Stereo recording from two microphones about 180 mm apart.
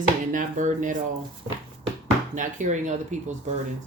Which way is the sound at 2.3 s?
40° right (ahead or behind).